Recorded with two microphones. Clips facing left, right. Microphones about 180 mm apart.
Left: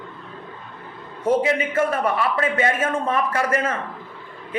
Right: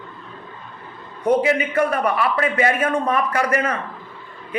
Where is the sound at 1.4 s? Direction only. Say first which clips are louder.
Right 2 dB; 25° left (ahead or behind).